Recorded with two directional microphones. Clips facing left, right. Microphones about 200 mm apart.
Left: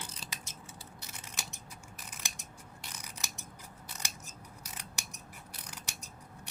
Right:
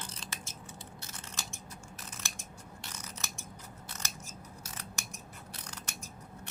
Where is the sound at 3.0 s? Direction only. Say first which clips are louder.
Right 2 dB; 15° left (ahead or behind).